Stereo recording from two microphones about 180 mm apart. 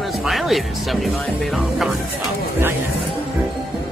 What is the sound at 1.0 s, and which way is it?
Speech, centre (ahead or behind).